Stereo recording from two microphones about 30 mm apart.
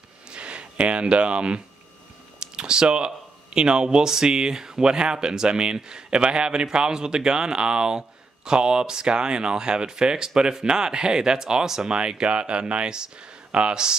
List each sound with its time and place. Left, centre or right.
0.3 s a sound: right
2.4 s speech: right
11.9 s speech: right